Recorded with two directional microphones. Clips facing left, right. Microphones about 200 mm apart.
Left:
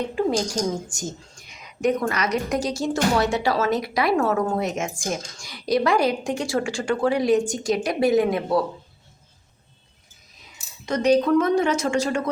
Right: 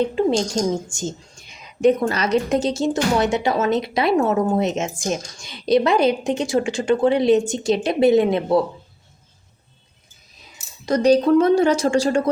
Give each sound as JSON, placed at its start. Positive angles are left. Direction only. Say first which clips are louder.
{"t": 0.2, "sound": "a woman's voice", "louder": "right 4 dB", "side_deg": -25}
{"t": 10.8, "sound": "a woman's voice", "louder": "right 4 dB", "side_deg": -35}